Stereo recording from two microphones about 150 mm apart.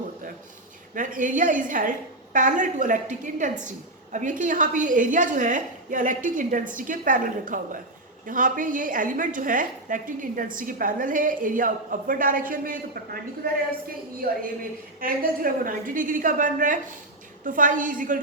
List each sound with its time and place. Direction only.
0.9 s a woman's voice: 60° right (ahead or behind); by 13.7 s 90° right
14.2 s a woman's voice: 80° right
15.0 s a woman's voice: 70° right (ahead or behind)